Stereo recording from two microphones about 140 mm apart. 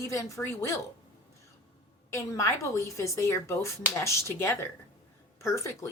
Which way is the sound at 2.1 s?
25° left (ahead or behind).